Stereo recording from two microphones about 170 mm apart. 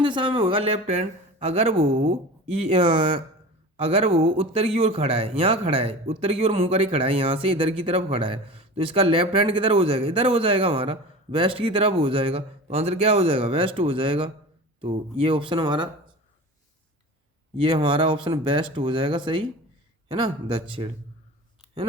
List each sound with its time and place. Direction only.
0.0 s speech: 30° right (ahead or behind)
17.6 s speech: 30° right (ahead or behind)